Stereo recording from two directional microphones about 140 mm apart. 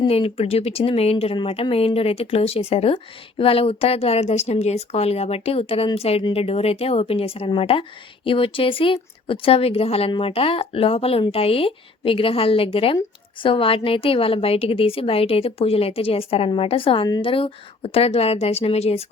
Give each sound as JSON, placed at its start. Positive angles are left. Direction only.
{"t": 0.1, "sound": "speech", "side_deg": 45}